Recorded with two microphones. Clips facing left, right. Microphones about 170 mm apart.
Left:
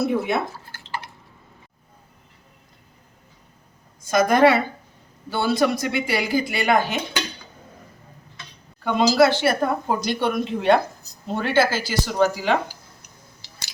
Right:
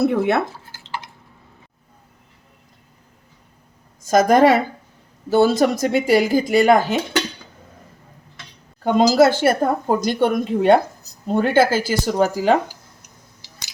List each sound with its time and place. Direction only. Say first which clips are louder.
0.0 s speech: right 4 dB; 65° right (ahead or behind)
4.0 s a woman's voice: right 3 dB; 40° right (ahead or behind)
8.8 s speech: right 3 dB; 45° right (ahead or behind)